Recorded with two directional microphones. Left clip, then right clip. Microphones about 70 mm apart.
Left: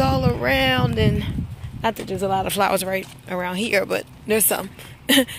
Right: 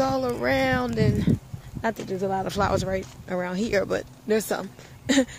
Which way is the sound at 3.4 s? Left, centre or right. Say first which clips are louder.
Left 5 dB; right.